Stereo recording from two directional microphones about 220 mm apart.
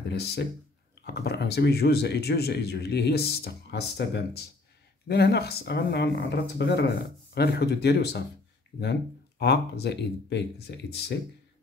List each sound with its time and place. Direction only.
0.1 s speech: 50° left (ahead or behind)
9.4 s speech: 50° left (ahead or behind)